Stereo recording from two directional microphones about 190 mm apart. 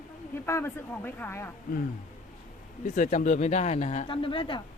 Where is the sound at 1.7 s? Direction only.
50° left (ahead or behind).